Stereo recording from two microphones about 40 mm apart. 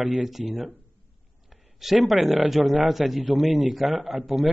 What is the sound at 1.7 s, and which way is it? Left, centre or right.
A man's voice, centre.